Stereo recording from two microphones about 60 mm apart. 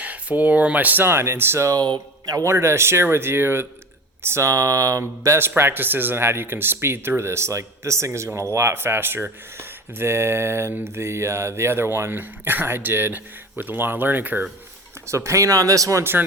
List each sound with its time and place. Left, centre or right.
0.0 s speech: right
1.0 s speech: right
4.4 s speech: right
5.4 s speech: right
15.0 s speech: right